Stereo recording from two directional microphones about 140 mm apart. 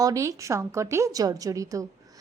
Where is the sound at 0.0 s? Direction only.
20° right (ahead or behind).